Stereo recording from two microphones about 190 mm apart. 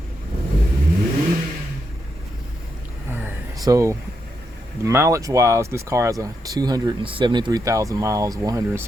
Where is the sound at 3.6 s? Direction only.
15° right (ahead or behind).